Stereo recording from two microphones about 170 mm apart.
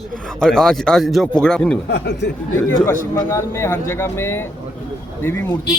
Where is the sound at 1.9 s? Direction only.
90° left.